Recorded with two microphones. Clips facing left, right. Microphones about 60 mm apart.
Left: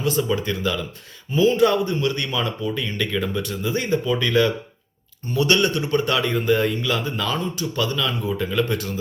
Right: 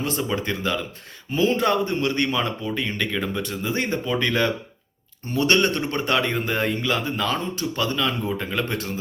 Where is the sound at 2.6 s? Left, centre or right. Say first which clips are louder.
Left 1 dB; right.